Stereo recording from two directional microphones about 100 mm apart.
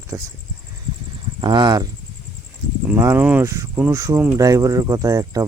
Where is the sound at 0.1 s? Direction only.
25° right (ahead or behind).